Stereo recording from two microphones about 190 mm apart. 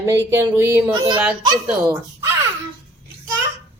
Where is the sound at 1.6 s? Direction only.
10° right (ahead or behind).